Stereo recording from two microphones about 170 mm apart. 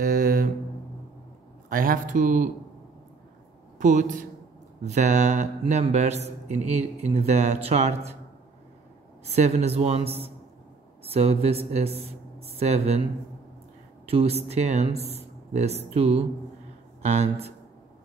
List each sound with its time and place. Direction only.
0.0 s a sound: 55° right (ahead or behind)
1.7 s speech: 55° right (ahead or behind)
3.7 s speech: 45° right (ahead or behind)
9.3 s speech: 40° right (ahead or behind)
14.0 s speech: 35° right (ahead or behind)